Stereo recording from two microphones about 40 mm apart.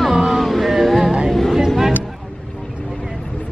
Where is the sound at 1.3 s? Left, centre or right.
Centre.